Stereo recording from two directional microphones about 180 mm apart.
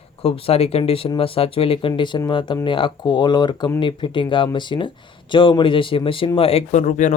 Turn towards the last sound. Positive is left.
turn(degrees=40)  # may be behind; listen again after turning